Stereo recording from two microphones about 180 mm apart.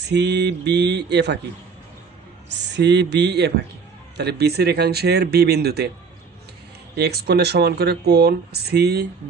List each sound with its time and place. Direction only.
0.0 s a sound: 70° right (ahead or behind)
2.5 s speech: 75° right (ahead or behind)
6.9 s speech: 65° right (ahead or behind)